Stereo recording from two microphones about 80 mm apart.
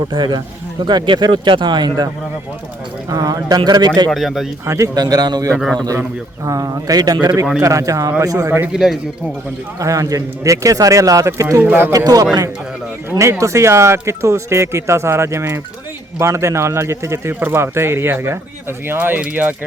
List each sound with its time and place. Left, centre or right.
0.1 s speech: right
3.1 s a man's voice: right
4.1 s speech: centre
4.6 s speech: right
4.9 s a man's voice: right
6.4 s speech: right
7.6 s speech: right
8.7 s speech: centre
9.8 s speech: right
11.6 s speech: right
11.9 s speech: right
13.1 s speech: right